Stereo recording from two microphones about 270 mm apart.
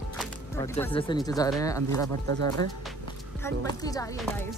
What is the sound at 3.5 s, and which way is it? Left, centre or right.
Speech, centre.